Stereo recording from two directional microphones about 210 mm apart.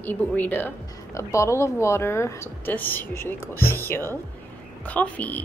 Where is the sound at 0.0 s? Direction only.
10° left (ahead or behind).